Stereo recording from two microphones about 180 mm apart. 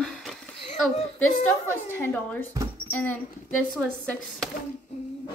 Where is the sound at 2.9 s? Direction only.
10° left (ahead or behind).